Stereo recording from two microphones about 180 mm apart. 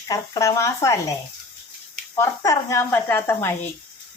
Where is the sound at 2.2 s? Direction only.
15° left (ahead or behind).